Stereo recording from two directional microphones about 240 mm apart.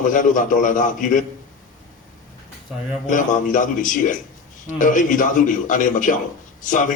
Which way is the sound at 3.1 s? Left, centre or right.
Left.